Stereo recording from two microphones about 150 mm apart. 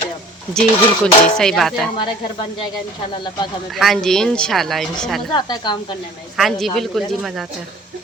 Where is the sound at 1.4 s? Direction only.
5° left (ahead or behind).